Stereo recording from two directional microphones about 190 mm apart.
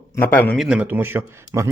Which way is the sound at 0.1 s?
10° left (ahead or behind).